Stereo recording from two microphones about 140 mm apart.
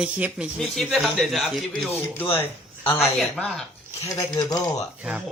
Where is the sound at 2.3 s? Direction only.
15° left (ahead or behind).